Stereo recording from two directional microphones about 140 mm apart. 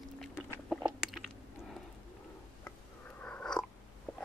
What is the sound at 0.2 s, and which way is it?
Biting, centre (ahead or behind).